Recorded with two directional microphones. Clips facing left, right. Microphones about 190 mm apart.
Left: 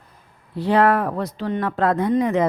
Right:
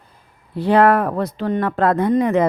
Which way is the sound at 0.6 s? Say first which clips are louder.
Right 3 dB; 60° right (ahead or behind).